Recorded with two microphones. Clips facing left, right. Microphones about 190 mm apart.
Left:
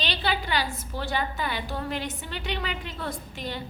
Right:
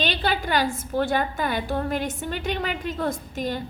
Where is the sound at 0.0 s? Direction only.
50° right (ahead or behind).